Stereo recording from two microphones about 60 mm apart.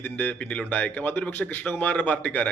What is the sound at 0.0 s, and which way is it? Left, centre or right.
A man's voice, left.